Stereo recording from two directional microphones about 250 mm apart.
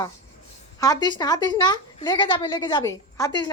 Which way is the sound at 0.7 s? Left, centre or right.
Centre.